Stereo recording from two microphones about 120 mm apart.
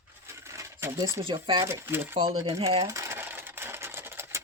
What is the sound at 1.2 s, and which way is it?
Speech, 45° right (ahead or behind).